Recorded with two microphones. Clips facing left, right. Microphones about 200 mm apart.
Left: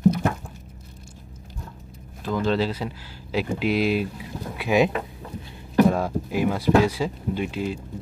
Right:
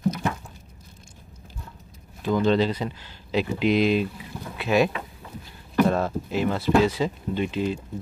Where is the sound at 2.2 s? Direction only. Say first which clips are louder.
Right 2 dB; centre (ahead or behind).